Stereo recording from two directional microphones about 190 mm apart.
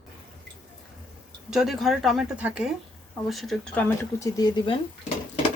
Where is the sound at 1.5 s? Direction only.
Centre (ahead or behind).